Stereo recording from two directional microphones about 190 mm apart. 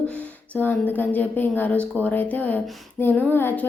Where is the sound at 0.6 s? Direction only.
10° left (ahead or behind).